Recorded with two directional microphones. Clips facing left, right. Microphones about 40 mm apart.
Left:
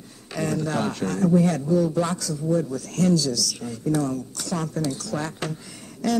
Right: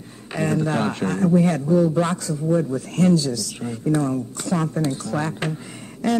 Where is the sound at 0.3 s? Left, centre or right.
Right.